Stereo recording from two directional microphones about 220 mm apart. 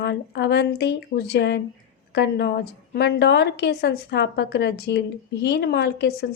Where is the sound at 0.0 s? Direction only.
50° left (ahead or behind).